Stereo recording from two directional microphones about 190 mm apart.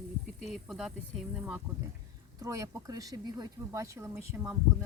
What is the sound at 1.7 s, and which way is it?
Speech, 10° right (ahead or behind).